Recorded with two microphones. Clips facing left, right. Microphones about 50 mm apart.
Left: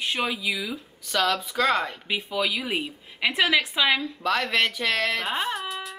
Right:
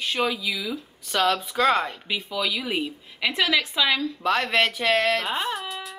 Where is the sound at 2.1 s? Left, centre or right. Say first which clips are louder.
Left 1 dB; centre.